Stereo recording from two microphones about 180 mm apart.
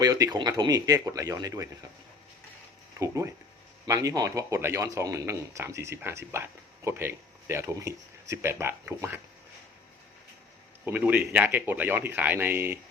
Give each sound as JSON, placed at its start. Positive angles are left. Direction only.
{"t": 0.0, "sound": "speech", "side_deg": -20}
{"t": 3.0, "sound": "speech", "side_deg": -15}
{"t": 10.8, "sound": "speech", "side_deg": -10}